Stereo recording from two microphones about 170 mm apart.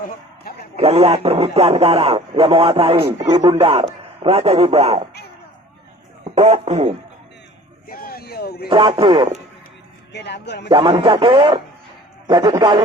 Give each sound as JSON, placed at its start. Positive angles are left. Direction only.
{"t": 0.5, "sound": "a man's voice", "side_deg": 65}
{"t": 0.8, "sound": "a man's voice", "side_deg": -35}
{"t": 6.3, "sound": "a man's voice", "side_deg": -40}
{"t": 7.9, "sound": "a sound", "side_deg": 60}
{"t": 8.7, "sound": "a man's voice", "side_deg": -30}
{"t": 10.1, "sound": "speech", "side_deg": 85}
{"t": 10.7, "sound": "speech", "side_deg": -30}